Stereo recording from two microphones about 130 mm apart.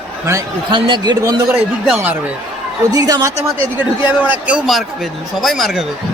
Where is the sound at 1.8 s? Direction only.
10° right (ahead or behind).